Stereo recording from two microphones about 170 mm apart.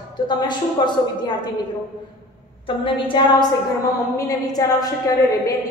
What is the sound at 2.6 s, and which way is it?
A woman's voice, 30° left (ahead or behind).